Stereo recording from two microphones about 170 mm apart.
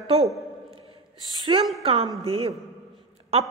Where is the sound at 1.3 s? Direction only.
30° right (ahead or behind).